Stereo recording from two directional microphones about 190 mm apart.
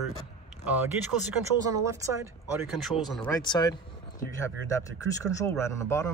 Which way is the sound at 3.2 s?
20° left (ahead or behind).